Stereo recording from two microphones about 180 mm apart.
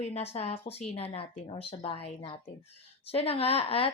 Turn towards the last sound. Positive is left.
turn(degrees=30)  # may be behind; listen again after turning